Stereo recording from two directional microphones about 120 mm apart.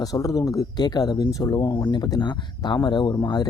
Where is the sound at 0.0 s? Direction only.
30° left (ahead or behind).